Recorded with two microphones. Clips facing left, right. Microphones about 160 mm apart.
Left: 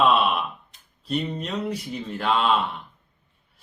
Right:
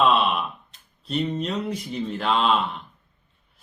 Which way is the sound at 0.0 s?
Centre (ahead or behind).